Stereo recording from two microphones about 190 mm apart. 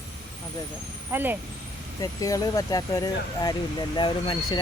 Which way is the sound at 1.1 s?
10° right (ahead or behind).